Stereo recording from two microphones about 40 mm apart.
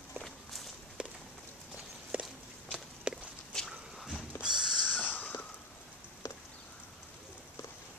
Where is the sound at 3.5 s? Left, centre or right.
Centre.